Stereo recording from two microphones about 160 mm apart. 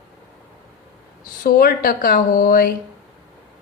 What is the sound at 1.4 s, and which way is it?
Speech, 65° left (ahead or behind).